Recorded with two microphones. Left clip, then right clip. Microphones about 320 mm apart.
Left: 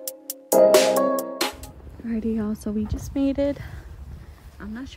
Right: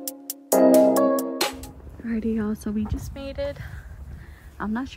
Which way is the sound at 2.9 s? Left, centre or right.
Centre.